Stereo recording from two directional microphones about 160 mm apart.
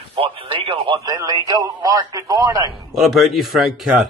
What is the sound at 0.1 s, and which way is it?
Speech, 35° right (ahead or behind).